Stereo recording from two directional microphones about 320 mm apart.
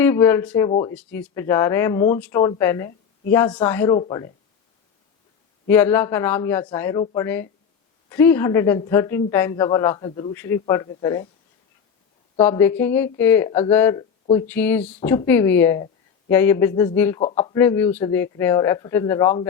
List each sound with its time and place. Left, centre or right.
0.0 s a man's voice: centre
5.6 s a man's voice: centre
12.4 s a man's voice: centre